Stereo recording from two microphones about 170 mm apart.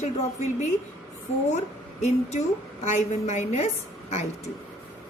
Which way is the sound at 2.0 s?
40° left (ahead or behind).